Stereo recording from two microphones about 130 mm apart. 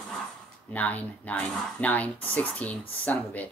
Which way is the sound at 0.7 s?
10° left (ahead or behind).